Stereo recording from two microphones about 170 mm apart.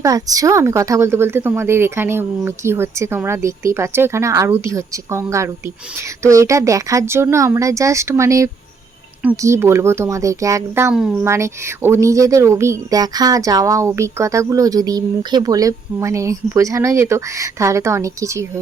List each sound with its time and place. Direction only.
0.0 s speech: 20° right (ahead or behind)
10.9 s speech: 5° right (ahead or behind)
11.3 s speech: 15° right (ahead or behind)